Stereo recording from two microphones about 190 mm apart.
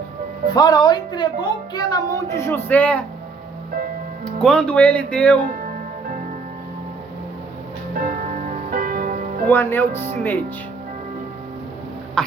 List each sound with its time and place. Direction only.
0.5 s a woman's voice: 20° left (ahead or behind)
3.7 s music: 45° right (ahead or behind)
4.4 s speech: 5° left (ahead or behind)
5.5 s music: 45° right (ahead or behind)
7.9 s music: 45° right (ahead or behind)
9.5 s speech: 10° left (ahead or behind)
12.2 s speech: 5° left (ahead or behind)